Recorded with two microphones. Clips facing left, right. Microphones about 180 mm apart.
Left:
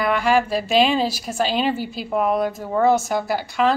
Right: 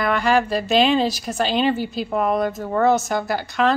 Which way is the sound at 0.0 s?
5° left (ahead or behind).